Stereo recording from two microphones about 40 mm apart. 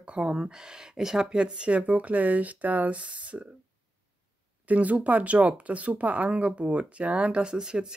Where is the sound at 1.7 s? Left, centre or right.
Right.